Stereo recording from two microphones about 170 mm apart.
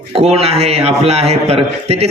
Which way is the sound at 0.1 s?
35° right (ahead or behind).